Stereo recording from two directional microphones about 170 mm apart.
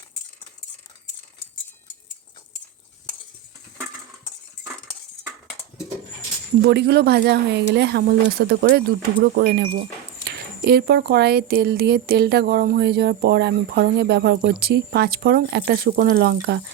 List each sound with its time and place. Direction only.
6.6 s speech: 75° right (ahead or behind)